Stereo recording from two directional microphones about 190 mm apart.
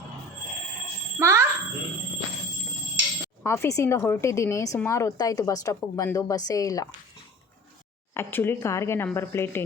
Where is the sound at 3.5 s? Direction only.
15° left (ahead or behind).